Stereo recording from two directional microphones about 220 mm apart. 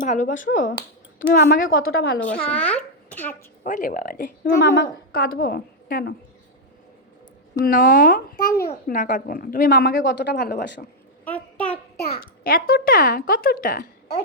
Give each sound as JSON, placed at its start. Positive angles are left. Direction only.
{"t": 0.0, "sound": "speech", "side_deg": 35}
{"t": 2.5, "sound": "babbling", "side_deg": 5}
{"t": 3.6, "sound": "speech", "side_deg": 35}
{"t": 7.6, "sound": "speech", "side_deg": 40}
{"t": 11.3, "sound": "a sound", "side_deg": 5}
{"t": 11.9, "sound": "a child's voice", "side_deg": 45}